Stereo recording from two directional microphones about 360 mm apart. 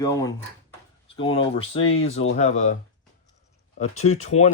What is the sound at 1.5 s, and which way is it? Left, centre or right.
Speech, centre.